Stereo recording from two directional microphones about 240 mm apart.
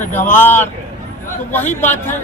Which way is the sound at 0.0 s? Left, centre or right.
Centre.